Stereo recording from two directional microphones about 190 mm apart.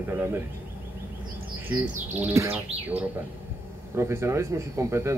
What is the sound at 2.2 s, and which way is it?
Speech, 10° right (ahead or behind).